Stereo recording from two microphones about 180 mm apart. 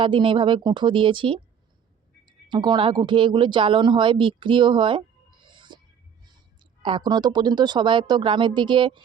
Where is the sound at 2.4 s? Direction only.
25° right (ahead or behind).